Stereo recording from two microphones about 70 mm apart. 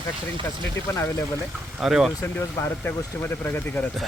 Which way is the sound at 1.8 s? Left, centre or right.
Centre.